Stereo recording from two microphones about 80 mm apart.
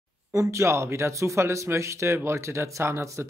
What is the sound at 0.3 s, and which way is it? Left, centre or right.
Speech, right.